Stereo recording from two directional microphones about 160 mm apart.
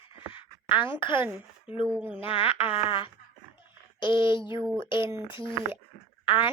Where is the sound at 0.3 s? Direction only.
30° left (ahead or behind).